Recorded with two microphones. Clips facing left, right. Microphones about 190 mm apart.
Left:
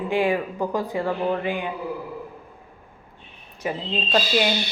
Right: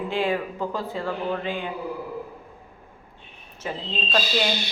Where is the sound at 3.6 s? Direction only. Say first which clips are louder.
Left 4 dB; 10° left (ahead or behind).